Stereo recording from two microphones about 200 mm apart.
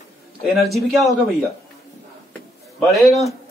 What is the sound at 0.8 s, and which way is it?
Speech, centre (ahead or behind).